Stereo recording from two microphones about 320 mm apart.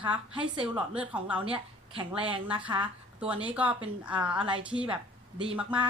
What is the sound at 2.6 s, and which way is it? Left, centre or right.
Speech, centre.